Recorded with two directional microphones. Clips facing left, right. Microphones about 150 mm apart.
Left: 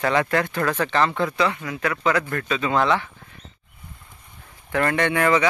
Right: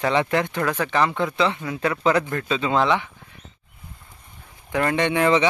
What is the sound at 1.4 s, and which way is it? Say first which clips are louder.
Speech: right 1 dB; 25° right (ahead or behind).